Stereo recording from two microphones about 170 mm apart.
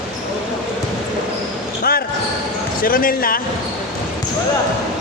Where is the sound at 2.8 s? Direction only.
55° left (ahead or behind).